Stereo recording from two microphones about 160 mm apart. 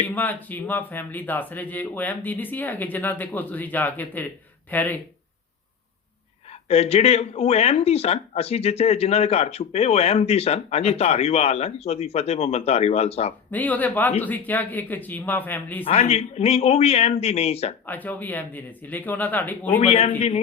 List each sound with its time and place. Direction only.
0.1 s speech: 10° left (ahead or behind)
6.5 s speech: 40° left (ahead or behind)
13.5 s speech: 10° left (ahead or behind)
15.8 s speech: 40° left (ahead or behind)
17.8 s speech: 10° left (ahead or behind)
19.8 s speech: 40° left (ahead or behind)